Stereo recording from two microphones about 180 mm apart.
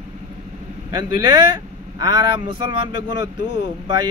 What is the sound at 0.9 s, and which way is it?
A man's voice, 25° right (ahead or behind).